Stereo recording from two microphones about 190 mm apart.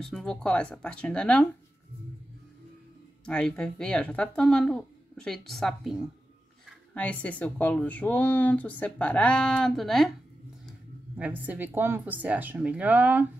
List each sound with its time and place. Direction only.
0.0 s speech: 5° left (ahead or behind)
3.3 s speech: 5° left (ahead or behind)
11.1 s a woman's voice: 10° right (ahead or behind)